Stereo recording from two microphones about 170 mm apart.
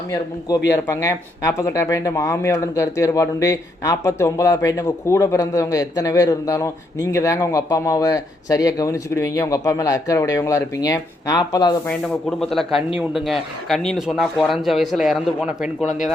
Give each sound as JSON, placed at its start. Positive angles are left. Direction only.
{"t": 0.1, "sound": "speech", "side_deg": 20}
{"t": 11.9, "sound": "speech", "side_deg": 5}